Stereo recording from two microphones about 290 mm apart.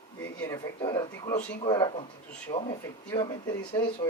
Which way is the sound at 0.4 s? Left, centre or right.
Centre.